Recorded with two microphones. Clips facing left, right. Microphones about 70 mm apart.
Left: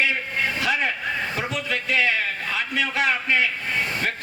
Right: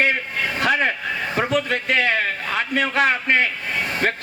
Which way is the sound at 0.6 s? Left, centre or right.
Right.